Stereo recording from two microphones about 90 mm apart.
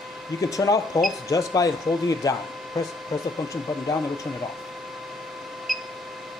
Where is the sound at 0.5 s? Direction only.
40° left (ahead or behind).